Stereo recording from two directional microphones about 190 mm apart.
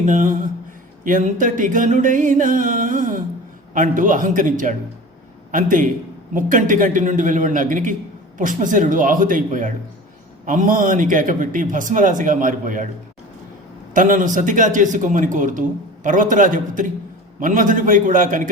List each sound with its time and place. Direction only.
0.0 s a man's voice: 45° right (ahead or behind)
13.9 s a man's voice: 45° right (ahead or behind)